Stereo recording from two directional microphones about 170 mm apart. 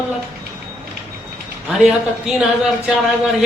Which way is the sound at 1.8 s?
Centre (ahead or behind).